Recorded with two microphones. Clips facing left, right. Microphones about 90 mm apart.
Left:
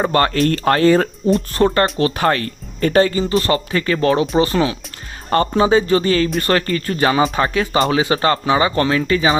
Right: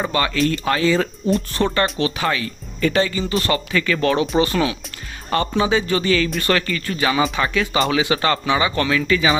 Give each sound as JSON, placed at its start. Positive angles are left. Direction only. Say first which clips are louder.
{"t": 0.1, "sound": "speech", "louder": "left 4 dB", "side_deg": 45}
{"t": 1.5, "sound": "speech", "louder": "left 4 dB", "side_deg": 40}